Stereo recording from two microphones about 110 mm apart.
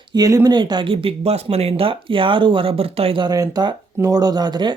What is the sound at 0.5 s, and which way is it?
Speech, 45° right (ahead or behind).